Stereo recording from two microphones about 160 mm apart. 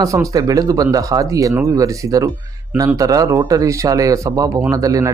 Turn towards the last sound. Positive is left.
turn(degrees=-20)  # may be behind; listen again after turning